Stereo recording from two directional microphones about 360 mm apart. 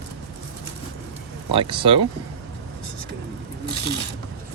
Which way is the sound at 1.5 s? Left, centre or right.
Centre.